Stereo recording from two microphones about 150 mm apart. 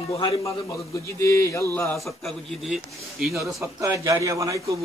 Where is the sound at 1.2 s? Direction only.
20° left (ahead or behind).